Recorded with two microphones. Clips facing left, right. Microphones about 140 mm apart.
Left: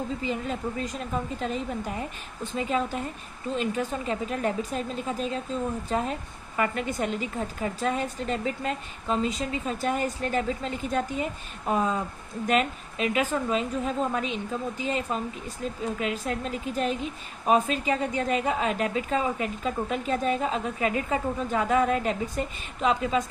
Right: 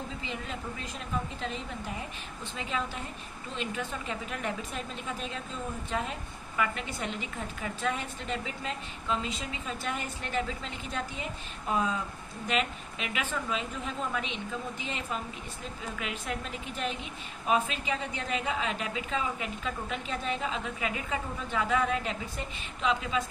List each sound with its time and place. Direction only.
0.2 s a woman's voice: 40° left (ahead or behind)